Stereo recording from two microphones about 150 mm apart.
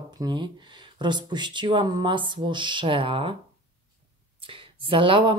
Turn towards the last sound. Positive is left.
turn(degrees=-35)  # may be behind; listen again after turning